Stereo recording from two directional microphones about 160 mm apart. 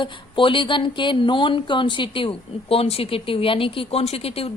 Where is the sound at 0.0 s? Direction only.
30° left (ahead or behind).